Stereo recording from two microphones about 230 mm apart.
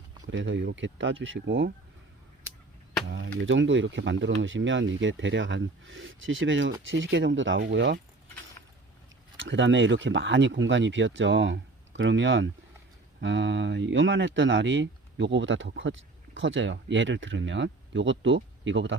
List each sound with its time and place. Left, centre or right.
0.3 s speech: right
3.1 s speech: right
9.4 s speech: right